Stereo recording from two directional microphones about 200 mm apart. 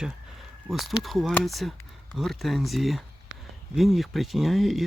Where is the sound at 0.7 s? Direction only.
Centre (ahead or behind).